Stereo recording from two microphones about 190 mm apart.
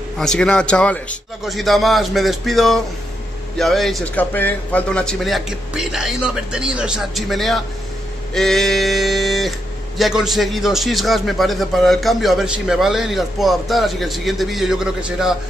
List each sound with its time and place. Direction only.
0.2 s a man's voice: 5° left (ahead or behind)